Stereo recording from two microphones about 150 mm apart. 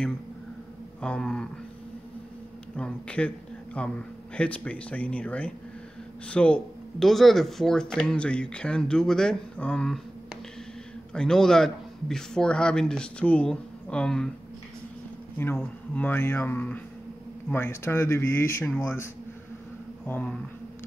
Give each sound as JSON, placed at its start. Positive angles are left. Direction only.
{"t": 1.0, "sound": "speech", "side_deg": 5}
{"t": 2.7, "sound": "speech", "side_deg": 5}
{"t": 15.3, "sound": "speech", "side_deg": 15}
{"t": 20.1, "sound": "speech", "side_deg": 10}